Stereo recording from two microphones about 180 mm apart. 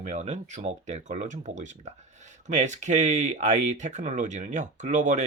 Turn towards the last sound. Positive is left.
turn(degrees=-40)  # may be behind; listen again after turning